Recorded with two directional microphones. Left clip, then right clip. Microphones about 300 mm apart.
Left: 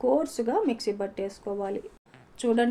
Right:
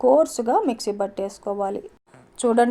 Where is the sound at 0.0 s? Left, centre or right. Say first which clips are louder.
Right 8 dB; right.